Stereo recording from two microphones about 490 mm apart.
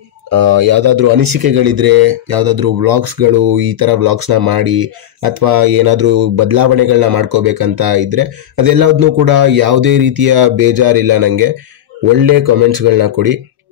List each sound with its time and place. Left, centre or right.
0.4 s speech: right